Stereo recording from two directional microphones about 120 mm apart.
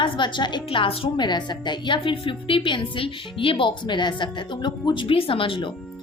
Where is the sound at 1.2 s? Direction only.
35° left (ahead or behind).